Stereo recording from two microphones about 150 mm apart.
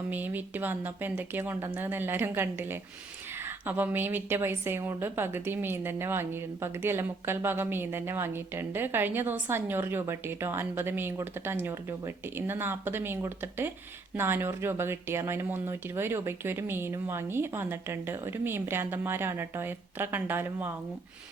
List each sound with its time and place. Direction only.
0.1 s a woman's voice: 10° right (ahead or behind)